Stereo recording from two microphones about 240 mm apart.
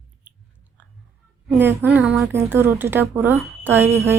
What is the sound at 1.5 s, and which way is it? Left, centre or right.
Speech, centre.